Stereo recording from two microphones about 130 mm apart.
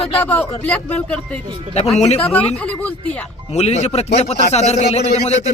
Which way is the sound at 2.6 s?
10° left (ahead or behind).